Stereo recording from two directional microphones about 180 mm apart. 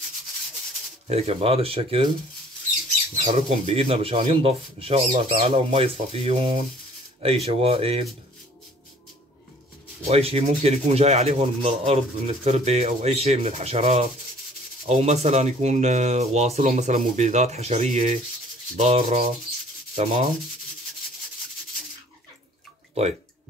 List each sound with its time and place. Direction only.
1.0 s rub: 35° right (ahead or behind)
3.2 s rub: 35° right (ahead or behind)
10.0 s rub: 35° right (ahead or behind)